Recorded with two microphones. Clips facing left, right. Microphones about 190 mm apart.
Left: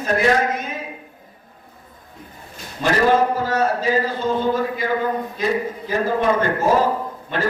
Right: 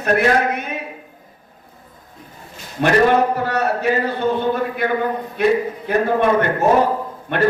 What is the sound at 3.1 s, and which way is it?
A man's voice, 65° right (ahead or behind).